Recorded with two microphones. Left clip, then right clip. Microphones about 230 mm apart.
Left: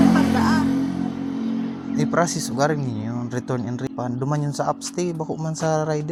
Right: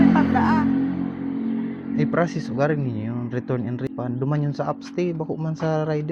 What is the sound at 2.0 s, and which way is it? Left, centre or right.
Speech, left.